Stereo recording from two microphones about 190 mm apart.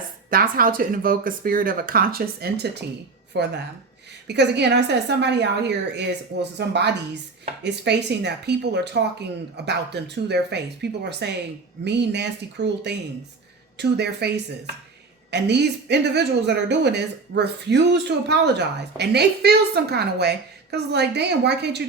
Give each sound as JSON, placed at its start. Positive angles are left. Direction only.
{"t": 0.3, "sound": "a woman's voice", "side_deg": -50}
{"t": 15.3, "sound": "a woman's voice", "side_deg": -60}